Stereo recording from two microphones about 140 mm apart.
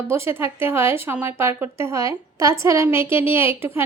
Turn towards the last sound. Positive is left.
turn(degrees=-15)  # may be behind; listen again after turning